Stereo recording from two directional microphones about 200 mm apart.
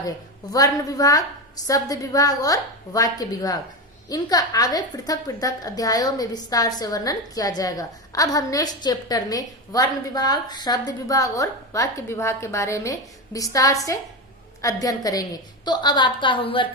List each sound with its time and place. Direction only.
0.5 s a woman's voice: 15° left (ahead or behind)